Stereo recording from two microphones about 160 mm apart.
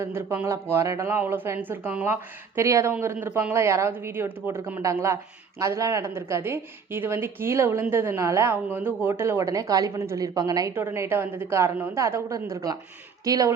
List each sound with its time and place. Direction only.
0.0 s a woman's voice: 15° right (ahead or behind)